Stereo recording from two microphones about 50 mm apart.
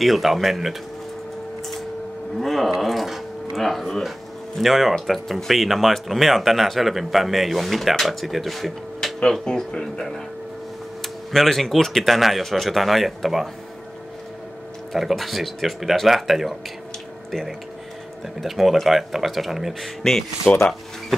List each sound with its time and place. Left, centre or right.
0.0 s speech: centre
2.3 s a sound: centre
4.6 s speech: centre
9.2 s speech: centre
14.9 s speech: centre
20.0 s speech: centre
20.5 s speech: left